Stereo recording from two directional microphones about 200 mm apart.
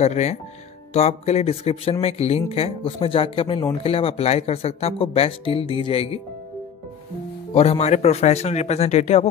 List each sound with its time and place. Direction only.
0.0 s speech: 35° left (ahead or behind)
7.5 s speech: 30° left (ahead or behind)